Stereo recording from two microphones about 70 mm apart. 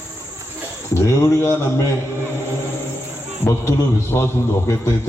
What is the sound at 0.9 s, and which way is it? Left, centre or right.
Speech, left.